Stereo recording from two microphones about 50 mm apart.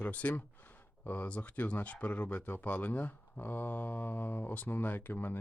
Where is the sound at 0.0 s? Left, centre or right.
Left.